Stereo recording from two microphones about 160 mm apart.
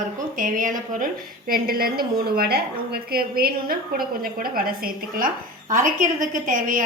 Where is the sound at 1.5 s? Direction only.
70° right (ahead or behind).